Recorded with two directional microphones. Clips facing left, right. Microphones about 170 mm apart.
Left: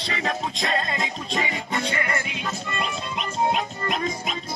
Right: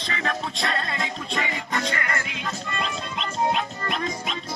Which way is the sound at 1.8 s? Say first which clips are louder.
Left 1 dB; 25° left (ahead or behind).